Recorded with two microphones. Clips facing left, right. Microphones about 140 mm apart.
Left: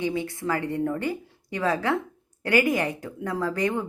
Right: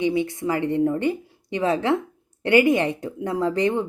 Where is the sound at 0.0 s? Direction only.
20° right (ahead or behind).